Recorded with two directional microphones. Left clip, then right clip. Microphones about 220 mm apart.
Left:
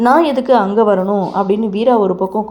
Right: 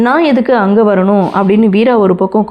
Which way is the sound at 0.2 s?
20° right (ahead or behind).